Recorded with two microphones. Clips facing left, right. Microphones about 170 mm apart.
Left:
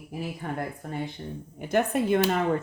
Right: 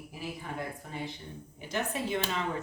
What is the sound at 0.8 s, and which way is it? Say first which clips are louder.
Speech: left 6 dB; 50° left (ahead or behind).